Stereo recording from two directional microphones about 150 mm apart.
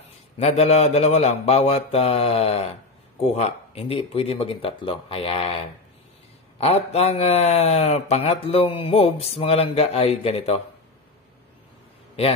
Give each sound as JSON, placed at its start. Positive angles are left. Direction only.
{"t": 0.4, "sound": "a man's voice", "side_deg": 45}
{"t": 6.6, "sound": "a man's voice", "side_deg": 45}